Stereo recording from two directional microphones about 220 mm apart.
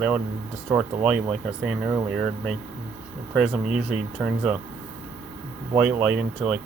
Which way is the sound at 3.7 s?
5° right (ahead or behind).